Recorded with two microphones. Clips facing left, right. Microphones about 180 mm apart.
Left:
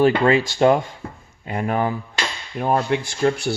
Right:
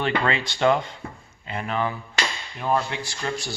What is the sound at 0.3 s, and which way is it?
Speech, 40° left (ahead or behind).